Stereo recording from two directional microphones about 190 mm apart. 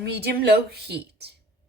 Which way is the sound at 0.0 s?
60° right (ahead or behind).